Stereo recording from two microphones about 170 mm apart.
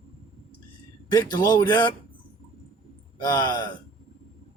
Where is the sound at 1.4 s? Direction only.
25° left (ahead or behind).